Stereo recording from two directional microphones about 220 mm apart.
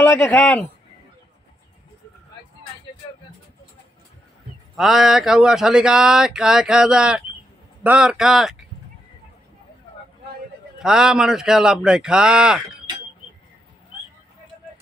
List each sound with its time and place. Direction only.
0.0 s speech: 5° left (ahead or behind)
4.7 s speech: centre (ahead or behind)
10.8 s speech: 5° right (ahead or behind)